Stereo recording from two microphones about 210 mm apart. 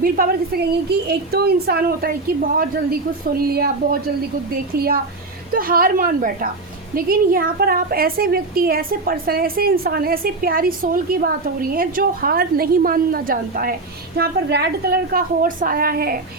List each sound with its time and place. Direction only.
0.0 s a woman's voice: 45° right (ahead or behind)